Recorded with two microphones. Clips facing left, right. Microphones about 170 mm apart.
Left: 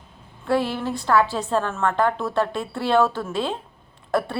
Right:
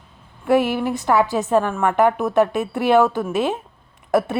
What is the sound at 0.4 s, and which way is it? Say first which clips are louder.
A woman's voice: right 5 dB; 15° right (ahead or behind).